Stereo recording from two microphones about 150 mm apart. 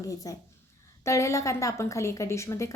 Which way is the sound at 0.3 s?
25° left (ahead or behind).